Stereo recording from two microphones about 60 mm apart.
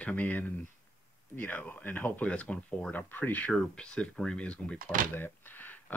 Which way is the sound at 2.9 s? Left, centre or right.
Left.